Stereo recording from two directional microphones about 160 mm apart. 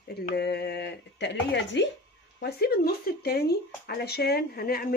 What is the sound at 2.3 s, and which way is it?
Speech, 80° left.